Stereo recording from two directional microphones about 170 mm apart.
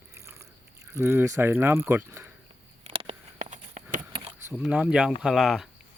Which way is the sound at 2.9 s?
35° right (ahead or behind).